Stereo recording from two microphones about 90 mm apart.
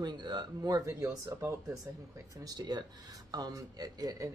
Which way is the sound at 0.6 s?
40° right (ahead or behind).